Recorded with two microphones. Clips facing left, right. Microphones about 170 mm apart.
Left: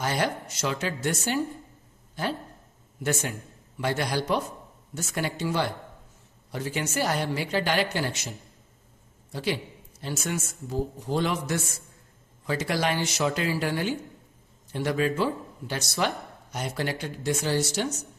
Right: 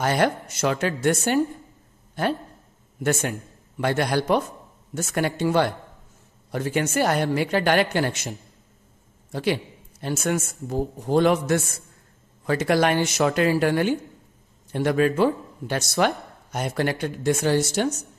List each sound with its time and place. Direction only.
0.0 s a man's voice: 55° right (ahead or behind)